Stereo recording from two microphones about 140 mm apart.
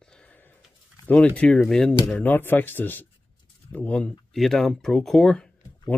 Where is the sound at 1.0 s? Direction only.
10° left (ahead or behind).